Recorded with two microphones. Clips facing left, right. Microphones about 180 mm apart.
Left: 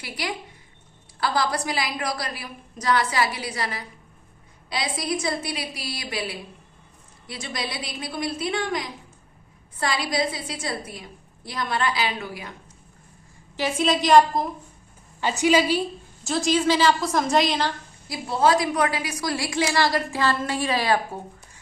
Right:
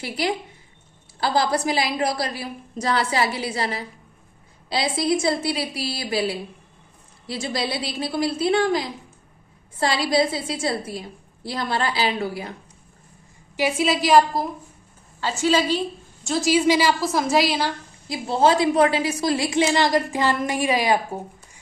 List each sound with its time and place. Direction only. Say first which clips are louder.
0.0 s a woman's voice: right 6 dB; 25° right (ahead or behind)
13.6 s a woman's voice: right 2 dB; 10° right (ahead or behind)
15.2 s a woman's voice: left 1 dB; 15° left (ahead or behind)
16.2 s a woman's voice: right 3 dB; 5° right (ahead or behind)
18.1 s a woman's voice: right 2 dB; 25° right (ahead or behind)